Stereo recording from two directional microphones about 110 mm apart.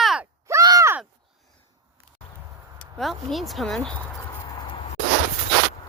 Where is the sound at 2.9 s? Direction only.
Centre (ahead or behind).